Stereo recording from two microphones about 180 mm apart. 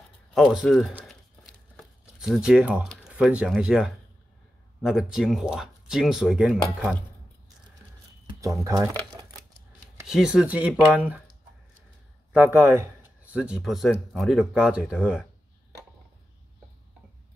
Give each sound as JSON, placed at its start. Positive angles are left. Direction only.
{"t": 0.3, "sound": "crumpling", "side_deg": 0}
{"t": 3.1, "sound": "speech", "side_deg": -5}
{"t": 8.3, "sound": "a sound", "side_deg": -20}
{"t": 10.0, "sound": "speech", "side_deg": -5}
{"t": 12.3, "sound": "speech", "side_deg": -10}